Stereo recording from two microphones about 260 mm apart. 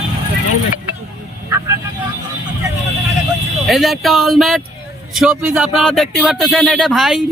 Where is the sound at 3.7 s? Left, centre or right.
Centre.